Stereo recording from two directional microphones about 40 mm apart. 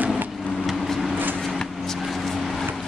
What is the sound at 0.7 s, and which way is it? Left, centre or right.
Vehicle, centre.